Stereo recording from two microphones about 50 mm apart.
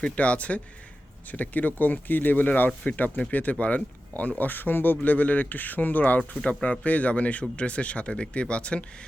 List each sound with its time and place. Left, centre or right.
0.2 s speech: left